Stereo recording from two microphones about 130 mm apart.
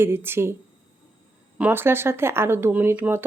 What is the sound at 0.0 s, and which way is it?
Speech, 20° right (ahead or behind).